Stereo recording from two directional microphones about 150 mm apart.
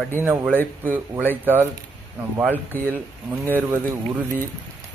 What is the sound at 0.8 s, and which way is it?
Speech, 10° right (ahead or behind).